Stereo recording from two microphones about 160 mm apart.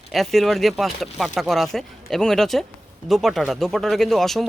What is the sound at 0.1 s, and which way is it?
Speech, centre (ahead or behind).